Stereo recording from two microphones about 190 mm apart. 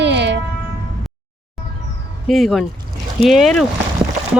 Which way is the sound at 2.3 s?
Centre (ahead or behind).